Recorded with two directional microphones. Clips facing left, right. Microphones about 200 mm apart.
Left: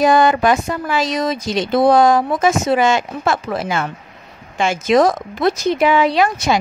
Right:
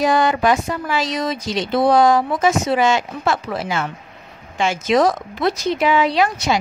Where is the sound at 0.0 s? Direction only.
50° left (ahead or behind).